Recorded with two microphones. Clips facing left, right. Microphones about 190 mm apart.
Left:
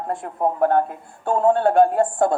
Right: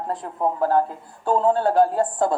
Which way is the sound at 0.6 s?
60° left (ahead or behind).